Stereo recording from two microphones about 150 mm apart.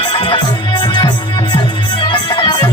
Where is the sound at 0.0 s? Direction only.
35° left (ahead or behind).